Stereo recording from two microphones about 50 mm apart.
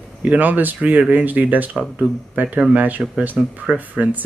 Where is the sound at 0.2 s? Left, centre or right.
Right.